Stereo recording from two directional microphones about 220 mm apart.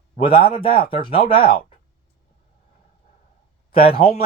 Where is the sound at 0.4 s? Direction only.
25° left (ahead or behind).